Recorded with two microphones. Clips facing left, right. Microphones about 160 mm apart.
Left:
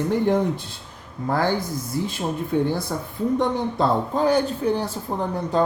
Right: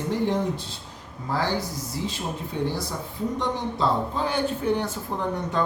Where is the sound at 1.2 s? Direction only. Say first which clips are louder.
Left 4 dB; 55° left (ahead or behind).